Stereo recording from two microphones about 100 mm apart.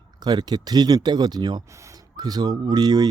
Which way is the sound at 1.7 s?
30° right (ahead or behind).